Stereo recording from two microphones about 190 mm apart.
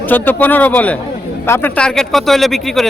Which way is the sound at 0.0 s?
10° left (ahead or behind).